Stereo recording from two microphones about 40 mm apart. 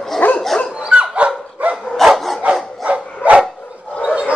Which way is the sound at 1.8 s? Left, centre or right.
Centre.